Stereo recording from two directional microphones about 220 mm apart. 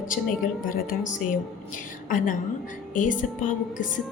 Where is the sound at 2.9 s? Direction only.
35° left (ahead or behind).